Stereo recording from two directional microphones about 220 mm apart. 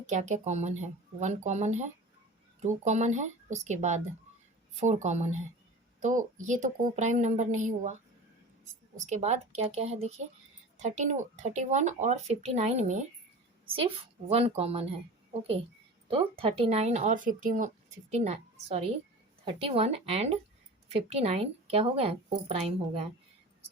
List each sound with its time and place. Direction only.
0.0 s speech: 35° right (ahead or behind)
9.0 s a woman's voice: 30° right (ahead or behind)
14.3 s a woman's voice: 25° right (ahead or behind)